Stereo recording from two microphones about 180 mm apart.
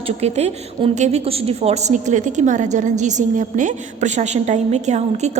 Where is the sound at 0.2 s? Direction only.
35° right (ahead or behind).